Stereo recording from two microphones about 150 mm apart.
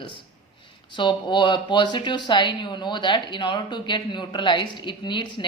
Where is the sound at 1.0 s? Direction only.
30° left (ahead or behind).